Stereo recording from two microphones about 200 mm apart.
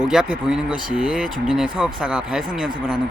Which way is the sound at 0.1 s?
5° right (ahead or behind).